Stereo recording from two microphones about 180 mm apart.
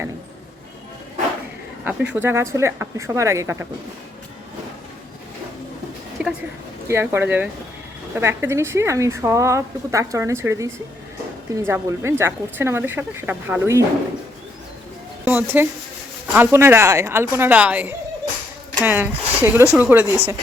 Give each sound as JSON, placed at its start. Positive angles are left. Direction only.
{"t": 1.8, "sound": "a woman's voice", "side_deg": -10}
{"t": 6.2, "sound": "a sound", "side_deg": -5}
{"t": 6.8, "sound": "a woman's voice", "side_deg": -15}
{"t": 15.2, "sound": "a woman's voice", "side_deg": -10}